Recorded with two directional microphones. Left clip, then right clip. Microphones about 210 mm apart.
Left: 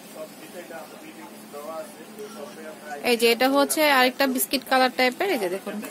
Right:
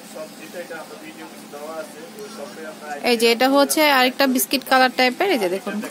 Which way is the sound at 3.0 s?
15° right (ahead or behind).